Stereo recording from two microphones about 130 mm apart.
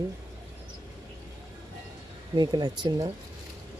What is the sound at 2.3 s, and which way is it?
Speech, 35° right (ahead or behind).